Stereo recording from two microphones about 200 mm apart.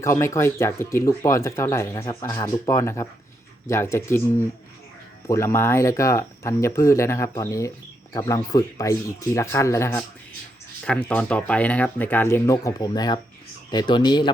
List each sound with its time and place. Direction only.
0.0 s speech: 15° left (ahead or behind)